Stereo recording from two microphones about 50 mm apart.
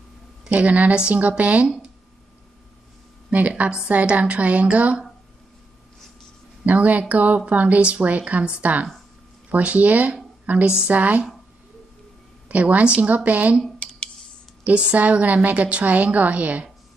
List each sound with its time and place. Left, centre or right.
0.6 s speech: right
3.3 s speech: right
6.6 s a woman's voice: right
12.4 s speech: right
14.6 s speech: right